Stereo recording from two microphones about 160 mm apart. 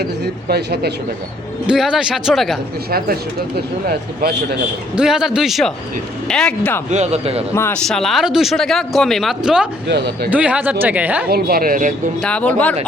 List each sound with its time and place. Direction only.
0.4 s speech: 80° right
1.6 s speech: 5° right (ahead or behind)
3.8 s speech: 75° right (ahead or behind)
4.9 s speech: 5° right (ahead or behind)
6.9 s speech: 40° right (ahead or behind)
7.5 s speech: 15° left (ahead or behind)
7.9 s speech: centre (ahead or behind)
11.3 s speech: 65° right (ahead or behind)
12.2 s speech: 10° left (ahead or behind)